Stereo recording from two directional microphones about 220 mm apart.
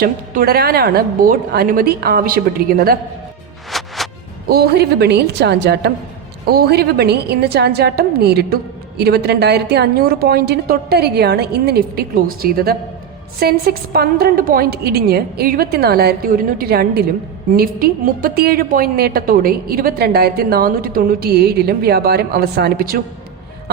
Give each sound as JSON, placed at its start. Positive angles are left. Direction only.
{"t": 0.0, "sound": "a woman's voice", "side_deg": -45}
{"t": 3.7, "sound": "music", "side_deg": 0}
{"t": 4.4, "sound": "a woman's voice", "side_deg": -45}